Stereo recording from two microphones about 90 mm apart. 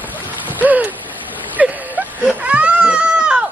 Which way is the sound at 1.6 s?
15° right (ahead or behind).